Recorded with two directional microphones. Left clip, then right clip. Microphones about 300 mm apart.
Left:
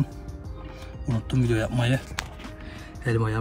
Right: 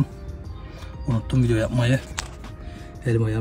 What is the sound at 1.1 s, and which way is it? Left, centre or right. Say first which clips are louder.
Speech: right 3 dB; centre.